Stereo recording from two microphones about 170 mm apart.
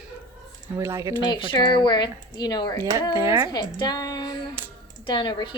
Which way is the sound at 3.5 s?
25° left (ahead or behind).